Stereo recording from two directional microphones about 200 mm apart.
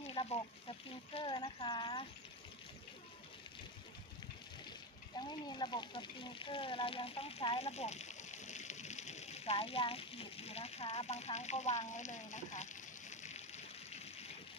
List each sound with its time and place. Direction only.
0.0 s speech: 30° left (ahead or behind)
5.1 s speech: 20° left (ahead or behind); by 12.6 s 35° left (ahead or behind)
13.1 s a sound: 35° left (ahead or behind)